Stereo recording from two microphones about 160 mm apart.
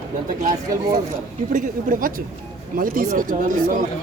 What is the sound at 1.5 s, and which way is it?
Speech, 55° right (ahead or behind).